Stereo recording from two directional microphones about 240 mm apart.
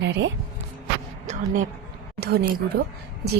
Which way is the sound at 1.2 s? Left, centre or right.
Right.